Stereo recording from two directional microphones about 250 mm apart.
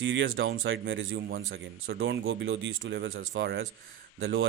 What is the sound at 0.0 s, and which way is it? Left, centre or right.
Speech, right.